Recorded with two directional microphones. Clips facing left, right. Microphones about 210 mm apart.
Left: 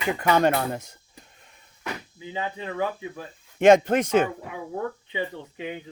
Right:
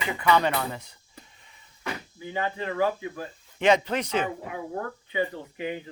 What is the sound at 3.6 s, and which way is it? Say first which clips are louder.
Speech: left 6 dB; 50° left (ahead or behind).